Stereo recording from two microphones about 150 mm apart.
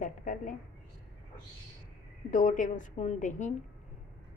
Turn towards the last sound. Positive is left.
turn(degrees=55)  # may be behind; listen again after turning